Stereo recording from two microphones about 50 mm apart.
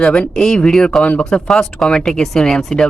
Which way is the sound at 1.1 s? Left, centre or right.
Left.